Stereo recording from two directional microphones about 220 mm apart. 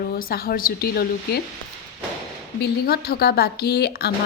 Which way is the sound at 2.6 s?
45° left (ahead or behind).